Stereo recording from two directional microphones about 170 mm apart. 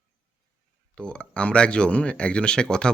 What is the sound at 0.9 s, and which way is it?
Speech, 5° left (ahead or behind).